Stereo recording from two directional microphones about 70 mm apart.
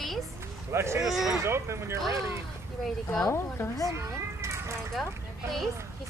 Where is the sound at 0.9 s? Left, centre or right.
Centre.